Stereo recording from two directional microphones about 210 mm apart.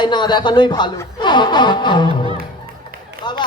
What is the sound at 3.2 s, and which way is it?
Speech, 20° left (ahead or behind).